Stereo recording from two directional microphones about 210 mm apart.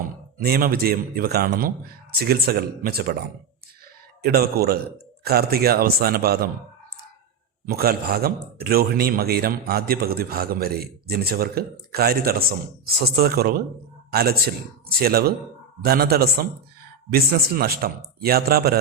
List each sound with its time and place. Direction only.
0.3 s speech: 45° right (ahead or behind)
4.2 s speech: 50° right (ahead or behind)
7.7 s speech: 45° right (ahead or behind)